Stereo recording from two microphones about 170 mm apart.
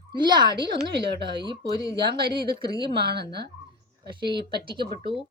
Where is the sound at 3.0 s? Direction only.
75° right (ahead or behind).